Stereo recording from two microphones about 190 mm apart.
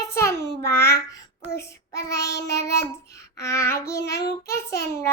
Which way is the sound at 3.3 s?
15° left (ahead or behind).